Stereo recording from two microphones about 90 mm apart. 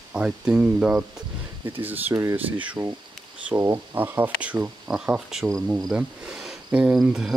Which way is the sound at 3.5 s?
30° right (ahead or behind).